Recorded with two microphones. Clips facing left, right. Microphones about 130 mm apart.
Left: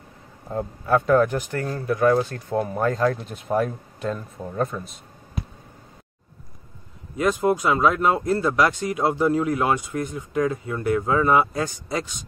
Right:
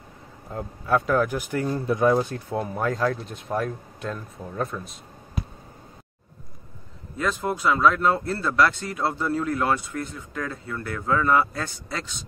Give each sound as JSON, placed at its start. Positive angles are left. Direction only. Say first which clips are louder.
{"t": 0.5, "sound": "speech", "louder": "left 3 dB", "side_deg": 0}
{"t": 2.5, "sound": "speech", "louder": "left 4 dB", "side_deg": 0}
{"t": 7.2, "sound": "speech", "louder": "left 6 dB", "side_deg": 15}